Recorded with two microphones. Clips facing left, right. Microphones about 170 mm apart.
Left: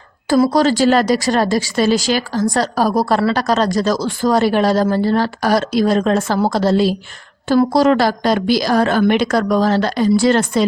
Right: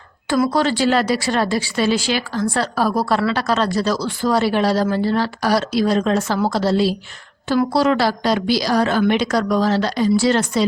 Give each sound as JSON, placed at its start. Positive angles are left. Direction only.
{"t": 0.3, "sound": "a woman's voice", "side_deg": 35}